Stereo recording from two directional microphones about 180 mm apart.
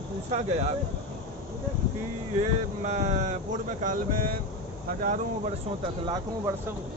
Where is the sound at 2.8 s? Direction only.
40° right (ahead or behind).